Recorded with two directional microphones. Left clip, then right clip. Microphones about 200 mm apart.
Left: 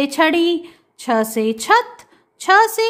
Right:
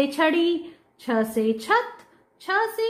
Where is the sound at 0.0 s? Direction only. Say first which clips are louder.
Left 5 dB; 25° left (ahead or behind).